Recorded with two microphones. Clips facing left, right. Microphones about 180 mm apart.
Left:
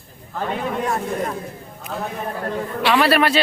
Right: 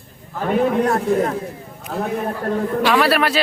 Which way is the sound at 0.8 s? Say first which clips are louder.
Right 5 dB; 65° right (ahead or behind).